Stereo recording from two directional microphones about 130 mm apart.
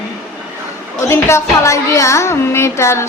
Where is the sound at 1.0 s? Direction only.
20° left (ahead or behind).